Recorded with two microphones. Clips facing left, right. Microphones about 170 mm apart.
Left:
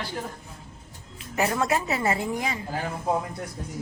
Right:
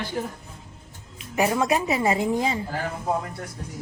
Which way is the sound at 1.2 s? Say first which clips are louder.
Right 3 dB; 15° right (ahead or behind).